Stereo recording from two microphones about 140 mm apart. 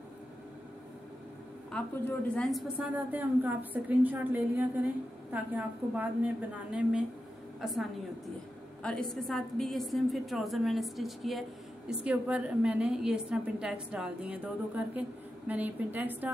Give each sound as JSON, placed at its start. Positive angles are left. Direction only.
{"t": 1.7, "sound": "a woman's voice", "side_deg": 5}
{"t": 2.8, "sound": "a woman's voice", "side_deg": -10}
{"t": 8.8, "sound": "a woman's voice", "side_deg": 5}